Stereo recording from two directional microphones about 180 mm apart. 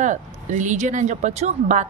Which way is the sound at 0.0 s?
45° right (ahead or behind).